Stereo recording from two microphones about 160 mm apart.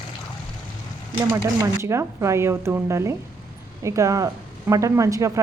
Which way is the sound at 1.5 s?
15° right (ahead or behind).